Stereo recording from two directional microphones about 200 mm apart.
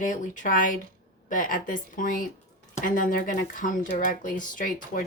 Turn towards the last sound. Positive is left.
turn(degrees=40)  # may be behind; listen again after turning